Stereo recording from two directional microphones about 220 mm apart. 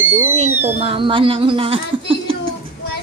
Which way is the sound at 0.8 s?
25° right (ahead or behind).